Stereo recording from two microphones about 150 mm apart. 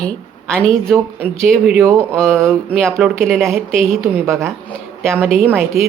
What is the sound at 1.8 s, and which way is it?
Speech, 15° right (ahead or behind).